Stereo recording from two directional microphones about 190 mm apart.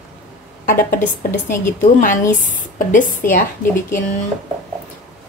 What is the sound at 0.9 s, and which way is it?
Speech, 10° left (ahead or behind).